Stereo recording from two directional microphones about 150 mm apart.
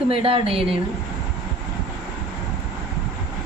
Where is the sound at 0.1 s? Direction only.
35° right (ahead or behind).